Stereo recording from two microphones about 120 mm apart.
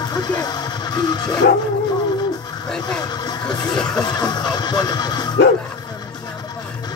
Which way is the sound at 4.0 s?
35° left (ahead or behind).